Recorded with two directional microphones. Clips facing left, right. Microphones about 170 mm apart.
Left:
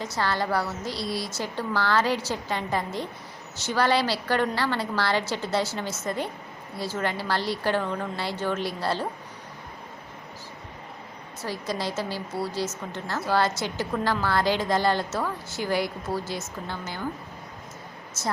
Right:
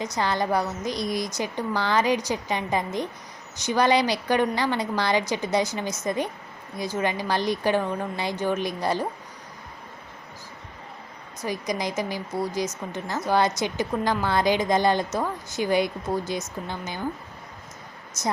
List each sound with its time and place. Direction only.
0.0 s a woman's voice: 15° right (ahead or behind)
11.4 s a woman's voice: 15° right (ahead or behind)
18.2 s a woman's voice: 15° right (ahead or behind)